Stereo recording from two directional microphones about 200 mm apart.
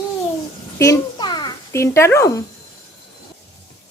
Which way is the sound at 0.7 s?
15° left (ahead or behind).